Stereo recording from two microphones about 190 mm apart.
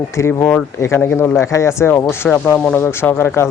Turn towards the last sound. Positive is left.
turn(degrees=15)  # may be behind; listen again after turning